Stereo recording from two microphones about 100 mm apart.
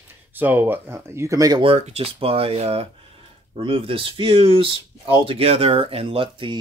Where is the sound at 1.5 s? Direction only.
75° right (ahead or behind).